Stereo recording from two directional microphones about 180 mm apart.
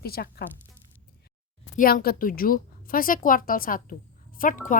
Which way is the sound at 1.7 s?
55° left (ahead or behind).